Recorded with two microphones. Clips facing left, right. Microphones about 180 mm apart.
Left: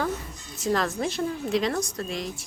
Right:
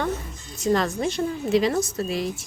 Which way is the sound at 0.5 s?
Centre (ahead or behind).